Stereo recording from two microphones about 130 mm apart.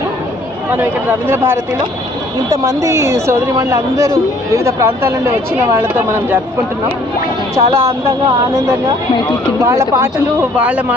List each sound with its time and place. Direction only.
1.3 s a woman's voice: 15° right (ahead or behind)
7.5 s speech: 20° right (ahead or behind)
9.6 s speech: 20° right (ahead or behind)
10.6 s a woman's voice: 10° right (ahead or behind)